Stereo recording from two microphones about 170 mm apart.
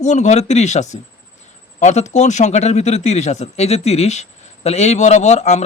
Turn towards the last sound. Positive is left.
turn(degrees=40)  # may be behind; listen again after turning